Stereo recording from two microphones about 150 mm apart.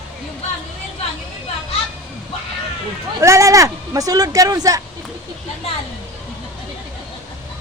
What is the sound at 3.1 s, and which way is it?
Speech, 20° right (ahead or behind).